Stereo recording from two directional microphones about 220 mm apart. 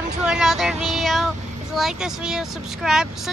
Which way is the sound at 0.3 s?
Centre (ahead or behind).